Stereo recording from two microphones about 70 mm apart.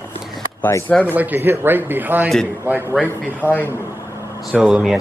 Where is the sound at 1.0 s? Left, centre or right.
Right.